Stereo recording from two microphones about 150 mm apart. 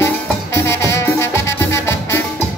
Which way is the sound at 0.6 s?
15° left (ahead or behind).